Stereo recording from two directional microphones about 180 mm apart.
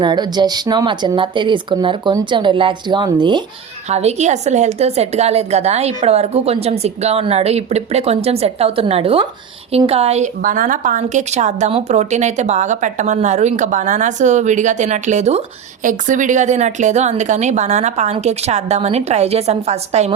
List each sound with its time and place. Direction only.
0.0 s speech: 25° right (ahead or behind)
3.8 s a woman's voice: 40° right (ahead or behind)